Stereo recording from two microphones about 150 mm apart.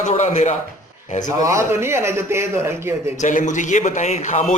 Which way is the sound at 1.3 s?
20° right (ahead or behind).